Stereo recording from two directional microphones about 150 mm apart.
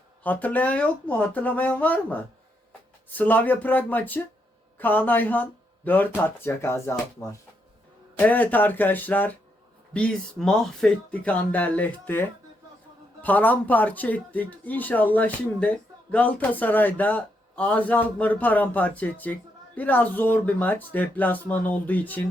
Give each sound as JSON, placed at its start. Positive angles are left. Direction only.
{"t": 0.2, "sound": "speech", "side_deg": 10}